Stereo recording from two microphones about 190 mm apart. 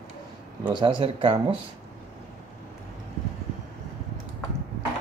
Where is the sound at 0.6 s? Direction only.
25° right (ahead or behind).